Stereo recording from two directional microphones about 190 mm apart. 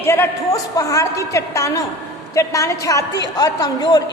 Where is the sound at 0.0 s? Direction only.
15° left (ahead or behind).